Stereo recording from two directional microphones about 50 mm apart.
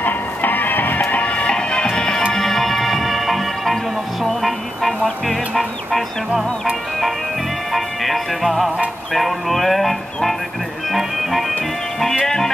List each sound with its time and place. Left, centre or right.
0.0 s music: left
1.1 s music: left; by 11.4 s centre